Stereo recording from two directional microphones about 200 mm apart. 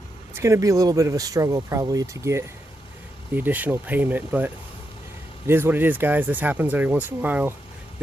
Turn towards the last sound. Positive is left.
turn(degrees=-10)  # may be behind; listen again after turning